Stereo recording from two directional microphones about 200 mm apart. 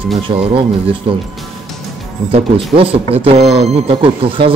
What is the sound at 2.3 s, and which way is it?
Speech, 25° right (ahead or behind).